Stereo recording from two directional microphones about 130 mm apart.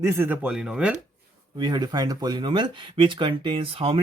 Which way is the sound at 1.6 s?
30° right (ahead or behind).